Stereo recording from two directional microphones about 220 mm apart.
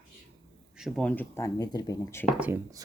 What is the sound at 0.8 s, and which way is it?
Speech, 5° left (ahead or behind).